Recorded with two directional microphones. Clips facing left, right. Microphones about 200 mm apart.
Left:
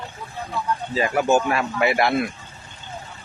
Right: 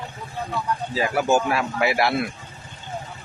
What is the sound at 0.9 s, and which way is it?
Speech, 5° right (ahead or behind).